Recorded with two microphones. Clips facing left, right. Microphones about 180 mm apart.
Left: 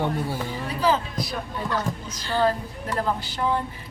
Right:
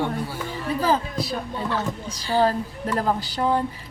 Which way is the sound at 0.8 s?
45° right (ahead or behind).